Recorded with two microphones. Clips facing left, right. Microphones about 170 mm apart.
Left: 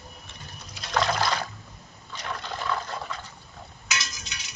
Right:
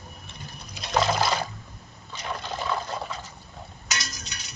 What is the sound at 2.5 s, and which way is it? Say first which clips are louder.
Water: right 1 dB; 20° right (ahead or behind).